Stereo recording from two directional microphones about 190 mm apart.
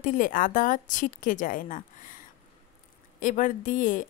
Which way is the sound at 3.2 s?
45° left (ahead or behind).